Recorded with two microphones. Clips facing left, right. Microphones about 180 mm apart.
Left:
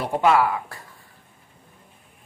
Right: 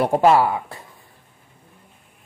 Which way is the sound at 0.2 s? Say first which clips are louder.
Even; 30° right (ahead or behind).